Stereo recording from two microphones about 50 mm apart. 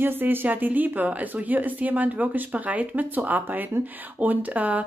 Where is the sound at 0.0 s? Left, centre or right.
Right.